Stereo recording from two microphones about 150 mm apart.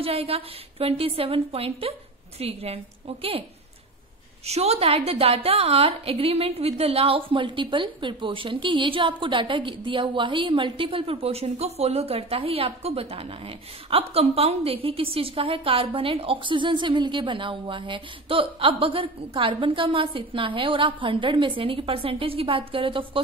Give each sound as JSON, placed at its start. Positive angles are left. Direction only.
{"t": 0.0, "sound": "a woman's voice", "side_deg": -40}
{"t": 4.5, "sound": "a woman's voice", "side_deg": -45}